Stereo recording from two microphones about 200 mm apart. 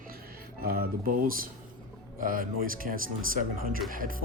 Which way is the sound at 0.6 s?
50° right (ahead or behind).